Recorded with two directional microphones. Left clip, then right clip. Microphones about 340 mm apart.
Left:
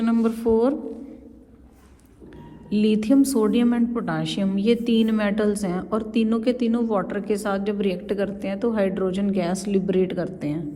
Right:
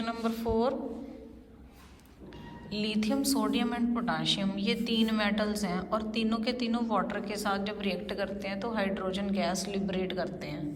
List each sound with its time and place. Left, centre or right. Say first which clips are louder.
0.0 s a woman's voice: left 10 dB; centre
2.6 s a woman's voice: left 11 dB; centre